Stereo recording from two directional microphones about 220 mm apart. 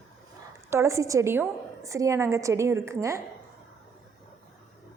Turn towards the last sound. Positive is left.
turn(degrees=-15)  # may be behind; listen again after turning